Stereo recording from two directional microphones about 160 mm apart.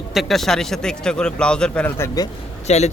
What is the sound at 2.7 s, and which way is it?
Speech, 45° left (ahead or behind).